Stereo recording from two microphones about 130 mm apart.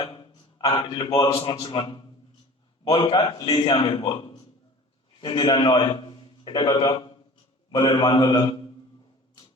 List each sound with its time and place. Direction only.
0.0 s a man's voice: 35° left (ahead or behind)